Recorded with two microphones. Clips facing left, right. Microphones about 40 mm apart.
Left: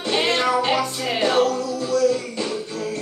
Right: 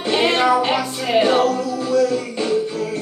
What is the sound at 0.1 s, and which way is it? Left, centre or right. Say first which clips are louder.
Music: right 4 dB; centre.